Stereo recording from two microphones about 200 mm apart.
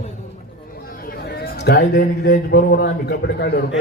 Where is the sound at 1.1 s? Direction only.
45° left (ahead or behind).